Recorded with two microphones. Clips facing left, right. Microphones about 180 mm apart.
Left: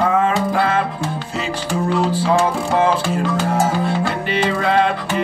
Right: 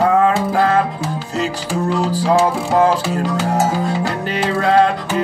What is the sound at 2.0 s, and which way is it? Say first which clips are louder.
Music: right 2 dB; 40° right (ahead or behind).